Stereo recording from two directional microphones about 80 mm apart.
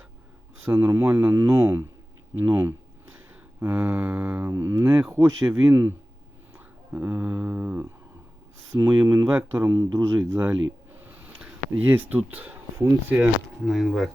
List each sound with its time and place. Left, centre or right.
0.6 s speech: right
2.4 s a sound: right
3.6 s speech: right
4.9 s speech: centre
5.1 s speech: right
5.5 s speech: right
6.9 s speech: right
11.0 s a sound: right
11.4 s speech: right
13.7 s speech: centre